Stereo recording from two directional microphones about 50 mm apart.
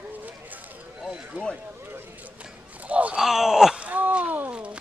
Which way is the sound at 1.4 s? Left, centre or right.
Right.